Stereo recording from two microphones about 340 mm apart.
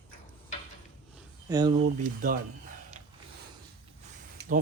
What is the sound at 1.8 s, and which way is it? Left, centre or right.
Cutlery, right.